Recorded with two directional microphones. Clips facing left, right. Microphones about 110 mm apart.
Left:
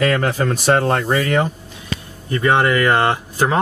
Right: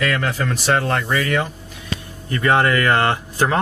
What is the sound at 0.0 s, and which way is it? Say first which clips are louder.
Speech: left 4 dB; 30° left (ahead or behind).